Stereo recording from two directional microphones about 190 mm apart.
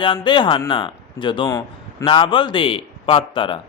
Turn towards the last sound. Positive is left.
turn(degrees=25)  # may be behind; listen again after turning